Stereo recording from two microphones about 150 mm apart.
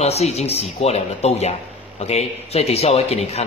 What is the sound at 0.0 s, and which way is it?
A man's voice, 45° left (ahead or behind).